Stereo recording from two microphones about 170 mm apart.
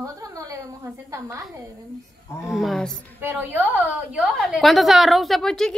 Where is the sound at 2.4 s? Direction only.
Centre (ahead or behind).